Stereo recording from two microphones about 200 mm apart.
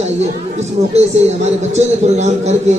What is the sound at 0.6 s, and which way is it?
Speech, 35° right (ahead or behind).